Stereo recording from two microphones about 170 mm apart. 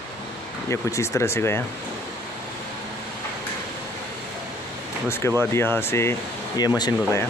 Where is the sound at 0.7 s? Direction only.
15° left (ahead or behind).